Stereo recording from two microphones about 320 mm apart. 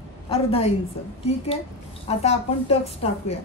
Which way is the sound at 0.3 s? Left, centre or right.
Centre.